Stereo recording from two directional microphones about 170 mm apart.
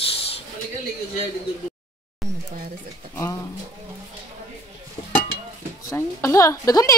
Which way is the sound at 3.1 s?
20° left (ahead or behind).